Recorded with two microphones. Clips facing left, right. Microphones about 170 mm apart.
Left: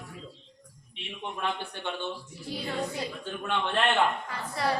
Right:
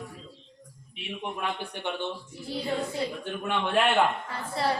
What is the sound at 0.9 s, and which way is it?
Speech, 10° right (ahead or behind).